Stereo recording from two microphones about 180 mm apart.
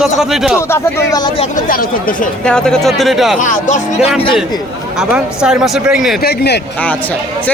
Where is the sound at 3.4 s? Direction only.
45° left (ahead or behind).